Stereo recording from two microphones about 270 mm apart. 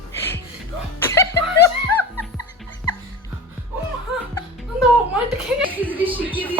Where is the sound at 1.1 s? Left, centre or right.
Centre.